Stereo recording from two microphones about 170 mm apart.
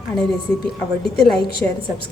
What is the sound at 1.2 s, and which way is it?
Speech, centre (ahead or behind).